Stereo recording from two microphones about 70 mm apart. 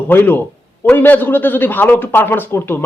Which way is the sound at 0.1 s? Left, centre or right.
Left.